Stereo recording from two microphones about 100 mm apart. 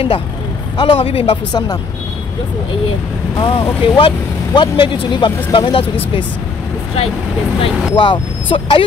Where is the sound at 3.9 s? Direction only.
55° left (ahead or behind).